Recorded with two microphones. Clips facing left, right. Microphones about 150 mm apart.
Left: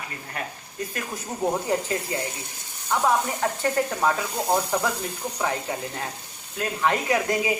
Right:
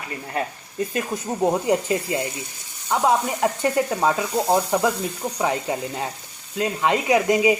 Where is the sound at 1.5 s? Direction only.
15° right (ahead or behind).